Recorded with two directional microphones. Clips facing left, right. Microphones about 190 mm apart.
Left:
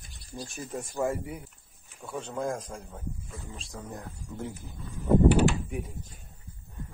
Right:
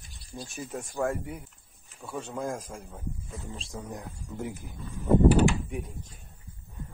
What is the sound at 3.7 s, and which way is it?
Speech, 15° right (ahead or behind).